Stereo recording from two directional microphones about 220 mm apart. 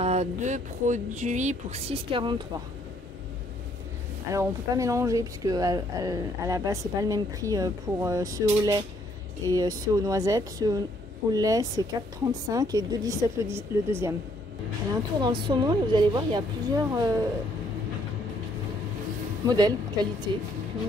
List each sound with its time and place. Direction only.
0.0 s speech: 30° right (ahead or behind)
4.3 s speech: 15° right (ahead or behind)
15.1 s a woman's voice: 20° right (ahead or behind)
19.4 s a woman's voice: 20° right (ahead or behind)